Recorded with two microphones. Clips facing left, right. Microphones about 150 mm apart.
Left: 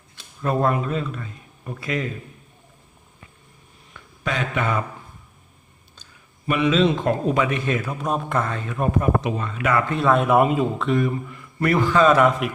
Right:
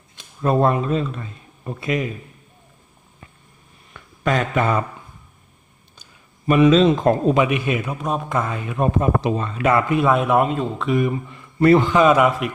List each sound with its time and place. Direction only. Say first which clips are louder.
0.2 s a man's voice: right 4 dB; 25° right (ahead or behind)
4.2 s speech: right 5 dB; 45° right (ahead or behind)
6.5 s speech: right 5 dB; 40° right (ahead or behind)
7.3 s speech: right 3 dB; 15° right (ahead or behind)
7.9 s speech: right 1 dB; centre (ahead or behind); by 9.8 s 30° right (ahead or behind)
9.9 s speech: right 1 dB; 10° right (ahead or behind)
10.8 s speech: right 5 dB; 15° right (ahead or behind)
11.3 s a man's voice: right 8 dB; 25° right (ahead or behind)